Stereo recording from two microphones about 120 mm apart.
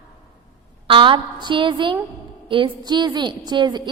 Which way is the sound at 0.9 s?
45° right (ahead or behind).